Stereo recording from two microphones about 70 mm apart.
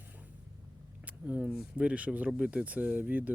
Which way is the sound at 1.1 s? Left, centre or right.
Centre.